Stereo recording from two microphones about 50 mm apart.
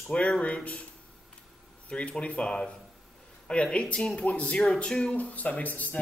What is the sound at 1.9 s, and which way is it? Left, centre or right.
Speech, left.